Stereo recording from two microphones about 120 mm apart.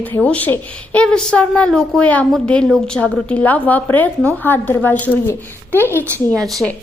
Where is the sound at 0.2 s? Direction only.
10° left (ahead or behind).